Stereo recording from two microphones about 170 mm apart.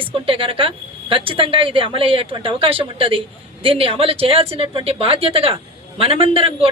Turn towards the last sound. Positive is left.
turn(degrees=-35)  # may be behind; listen again after turning